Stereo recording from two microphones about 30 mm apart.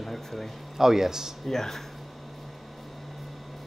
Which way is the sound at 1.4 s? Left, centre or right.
Centre.